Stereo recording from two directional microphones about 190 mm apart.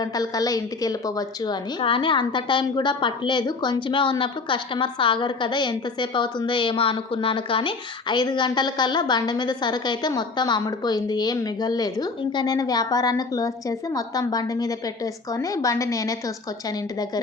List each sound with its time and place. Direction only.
0.0 s a woman's voice: 20° left (ahead or behind)